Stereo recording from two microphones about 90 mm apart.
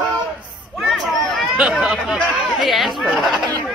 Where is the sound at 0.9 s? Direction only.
Centre (ahead or behind).